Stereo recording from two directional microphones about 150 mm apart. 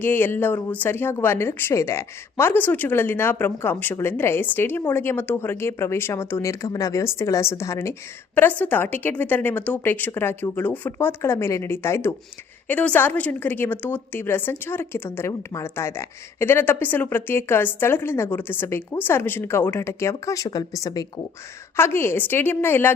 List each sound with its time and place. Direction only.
0.0 s a woman's voice: 15° left (ahead or behind)